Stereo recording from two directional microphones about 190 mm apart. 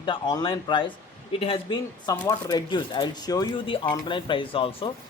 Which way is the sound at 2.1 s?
15° left (ahead or behind).